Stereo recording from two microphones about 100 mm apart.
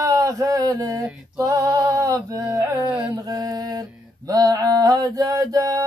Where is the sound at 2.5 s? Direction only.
35° right (ahead or behind).